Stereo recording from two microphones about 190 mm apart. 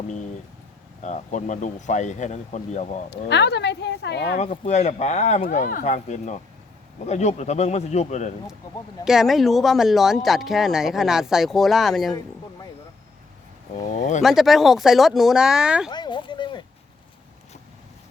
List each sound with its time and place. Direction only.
1.0 s speech: 40° left (ahead or behind)
3.1 s speech: 65° left (ahead or behind)
4.4 s speech: 35° left (ahead or behind)
9.0 s speech: centre (ahead or behind)
13.9 s speech: 40° left (ahead or behind)
14.2 s speech: centre (ahead or behind)
15.9 s a sound: 25° left (ahead or behind)